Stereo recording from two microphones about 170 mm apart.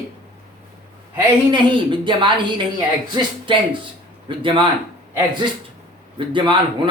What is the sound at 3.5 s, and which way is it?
Speech, 30° right (ahead or behind).